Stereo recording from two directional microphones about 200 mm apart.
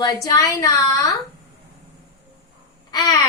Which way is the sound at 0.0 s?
20° left (ahead or behind).